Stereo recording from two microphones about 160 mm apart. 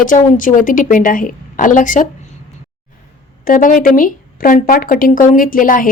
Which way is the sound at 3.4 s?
60° left (ahead or behind).